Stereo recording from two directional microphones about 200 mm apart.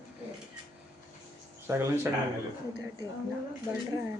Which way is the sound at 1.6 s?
10° right (ahead or behind).